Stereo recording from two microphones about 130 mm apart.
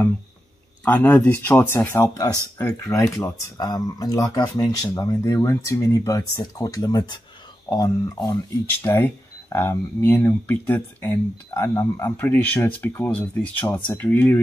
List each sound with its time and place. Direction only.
0.8 s speech: 15° left (ahead or behind)
2.2 s speech: 25° left (ahead or behind)